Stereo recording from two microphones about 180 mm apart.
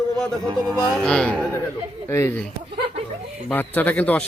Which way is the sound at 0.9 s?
5° left (ahead or behind).